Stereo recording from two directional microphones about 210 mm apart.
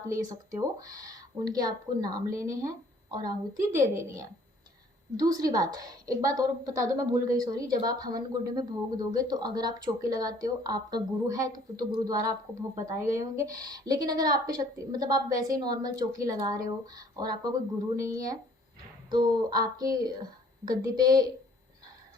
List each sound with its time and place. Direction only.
0.1 s speech: 15° right (ahead or behind)
5.1 s speech: 15° right (ahead or behind)